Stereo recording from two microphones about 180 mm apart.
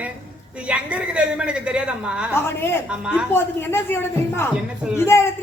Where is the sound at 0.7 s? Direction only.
5° right (ahead or behind).